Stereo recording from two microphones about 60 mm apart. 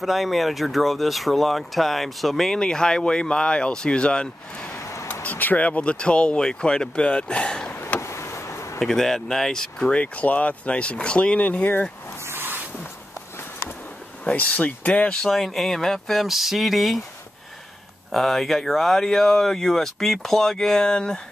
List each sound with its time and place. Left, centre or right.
0.0 s speech: centre
5.2 s speech: left
8.0 s vehicle: left
8.7 s speech: centre
10.1 s speech: left
12.3 s zipper: right
14.2 s speech: left
15.2 s speech: centre
18.1 s speech: centre